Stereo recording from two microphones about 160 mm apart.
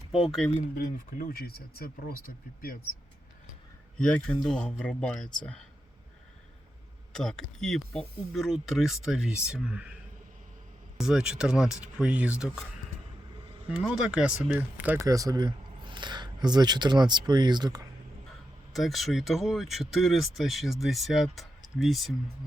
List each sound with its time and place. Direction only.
0.1 s speech: centre (ahead or behind)
0.8 s speech: 65° left (ahead or behind)
3.9 s speech: 5° left (ahead or behind)
7.1 s speech: 5° left (ahead or behind)
13.7 s speech: 5° right (ahead or behind)
15.0 s speech: 20° right (ahead or behind)
18.7 s speech: centre (ahead or behind)